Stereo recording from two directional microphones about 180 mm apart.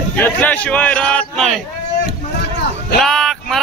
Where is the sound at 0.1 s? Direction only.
10° left (ahead or behind).